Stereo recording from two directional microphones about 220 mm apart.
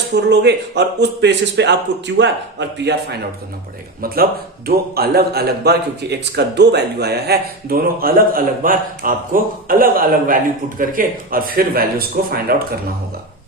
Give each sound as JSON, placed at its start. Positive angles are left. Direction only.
{"t": 0.2, "sound": "a man's voice", "side_deg": -50}